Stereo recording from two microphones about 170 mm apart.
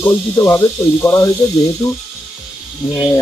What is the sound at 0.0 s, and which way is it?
Speech, 15° left (ahead or behind).